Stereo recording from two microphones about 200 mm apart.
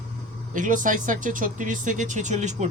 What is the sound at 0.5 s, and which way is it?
Speech, 40° right (ahead or behind).